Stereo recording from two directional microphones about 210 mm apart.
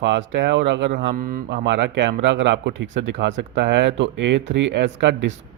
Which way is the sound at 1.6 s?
55° right (ahead or behind).